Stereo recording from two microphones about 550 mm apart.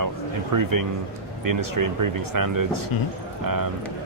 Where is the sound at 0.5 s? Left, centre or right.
Right.